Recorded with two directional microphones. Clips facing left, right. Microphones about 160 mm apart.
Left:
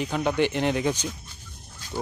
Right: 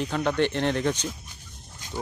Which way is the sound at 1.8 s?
20° right (ahead or behind).